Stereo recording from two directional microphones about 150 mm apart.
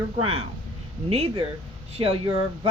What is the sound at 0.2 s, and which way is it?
Speech, 40° right (ahead or behind).